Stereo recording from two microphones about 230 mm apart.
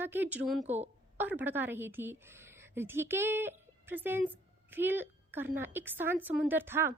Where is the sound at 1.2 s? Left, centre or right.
Centre.